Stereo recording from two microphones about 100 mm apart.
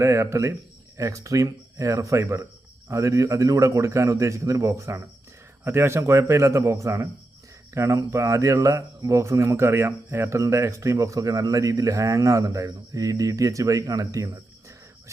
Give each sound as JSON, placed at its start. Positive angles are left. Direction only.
{"t": 0.0, "sound": "a man's voice", "side_deg": -30}